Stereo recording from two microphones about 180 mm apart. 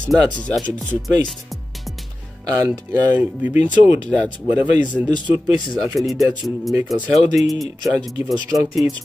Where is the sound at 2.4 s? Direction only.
20° right (ahead or behind).